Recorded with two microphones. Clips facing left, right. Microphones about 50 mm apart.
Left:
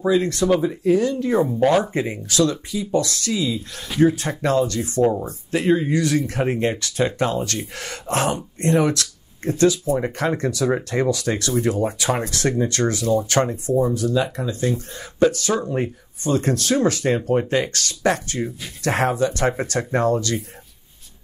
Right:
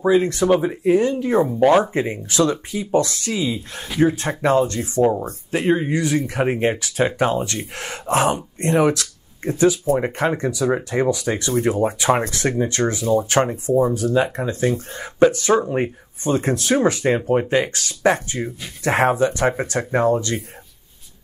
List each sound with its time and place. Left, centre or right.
0.0 s speech: right
2.2 s speech: right
13.9 s speech: right